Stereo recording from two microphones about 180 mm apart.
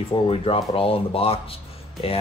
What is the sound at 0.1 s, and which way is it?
Speech, 30° left (ahead or behind).